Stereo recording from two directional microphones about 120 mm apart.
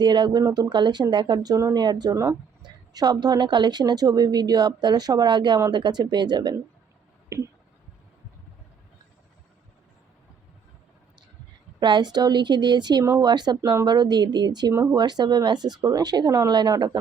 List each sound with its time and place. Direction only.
0.0 s a woman's voice: 35° right (ahead or behind)
7.3 s speech: 25° right (ahead or behind)
11.8 s a woman's voice: 40° right (ahead or behind)
13.6 s speech: 25° right (ahead or behind)
13.8 s a woman's voice: 35° right (ahead or behind)
14.7 s speech: 20° right (ahead or behind)
14.9 s a woman's voice: 35° right (ahead or behind)